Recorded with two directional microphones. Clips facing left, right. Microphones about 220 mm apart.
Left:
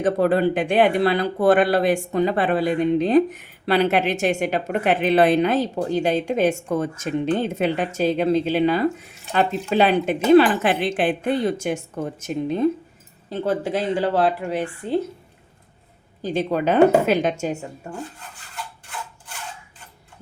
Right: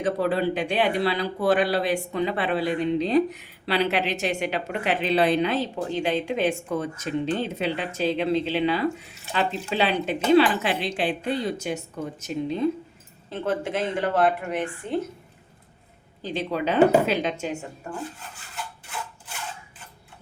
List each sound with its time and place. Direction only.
0.0 s speech: 50° left (ahead or behind)
13.3 s a woman's voice: 35° left (ahead or behind)
16.2 s speech: 45° left (ahead or behind)